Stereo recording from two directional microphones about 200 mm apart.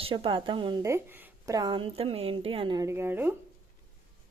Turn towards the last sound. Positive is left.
turn(degrees=-10)  # may be behind; listen again after turning